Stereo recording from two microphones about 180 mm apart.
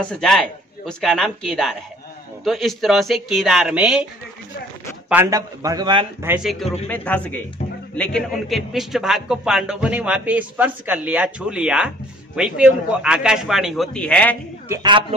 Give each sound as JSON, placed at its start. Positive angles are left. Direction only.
{"t": 0.0, "sound": "a man's voice", "side_deg": 5}
{"t": 5.1, "sound": "a man's voice", "side_deg": -15}
{"t": 6.2, "sound": "a man's voice", "side_deg": -5}
{"t": 14.7, "sound": "a man's voice", "side_deg": -25}